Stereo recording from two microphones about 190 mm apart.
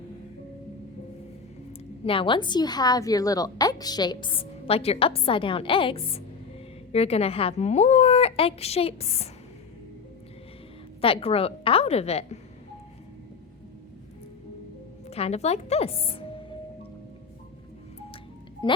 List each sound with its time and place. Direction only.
2.0 s a woman's voice: 25° left (ahead or behind)
11.0 s a woman's voice: 30° left (ahead or behind)
15.0 s a woman's voice: 35° left (ahead or behind)
18.6 s speech: 25° left (ahead or behind)